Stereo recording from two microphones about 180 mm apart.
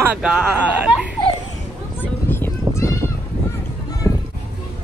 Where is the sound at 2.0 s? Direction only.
10° left (ahead or behind).